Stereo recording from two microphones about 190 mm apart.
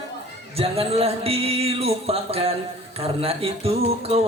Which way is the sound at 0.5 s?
30° right (ahead or behind).